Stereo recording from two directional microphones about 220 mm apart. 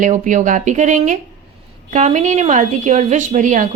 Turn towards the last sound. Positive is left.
turn(degrees=-35)  # may be behind; listen again after turning